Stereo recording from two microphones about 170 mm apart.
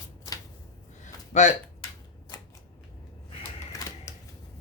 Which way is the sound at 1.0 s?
45° left (ahead or behind).